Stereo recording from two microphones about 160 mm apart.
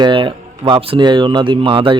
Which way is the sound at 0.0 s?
30° right (ahead or behind).